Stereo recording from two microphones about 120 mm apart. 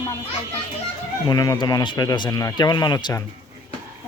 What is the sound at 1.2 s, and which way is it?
Speech, 30° left (ahead or behind).